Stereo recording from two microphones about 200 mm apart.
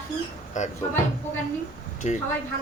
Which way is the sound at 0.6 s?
40° left (ahead or behind).